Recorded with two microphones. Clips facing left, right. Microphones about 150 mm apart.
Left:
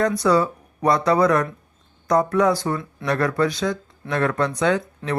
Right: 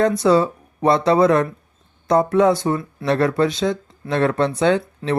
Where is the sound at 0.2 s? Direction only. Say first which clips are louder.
Right 3 dB; 25° right (ahead or behind).